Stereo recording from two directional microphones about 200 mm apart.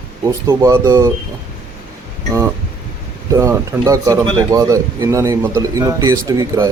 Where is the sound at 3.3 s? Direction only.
15° right (ahead or behind).